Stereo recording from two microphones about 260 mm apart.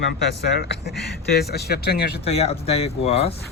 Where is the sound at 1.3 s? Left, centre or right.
Left.